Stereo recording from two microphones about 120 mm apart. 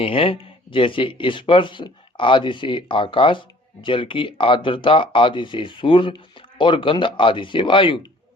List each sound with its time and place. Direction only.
0.0 s speech: 50° left (ahead or behind)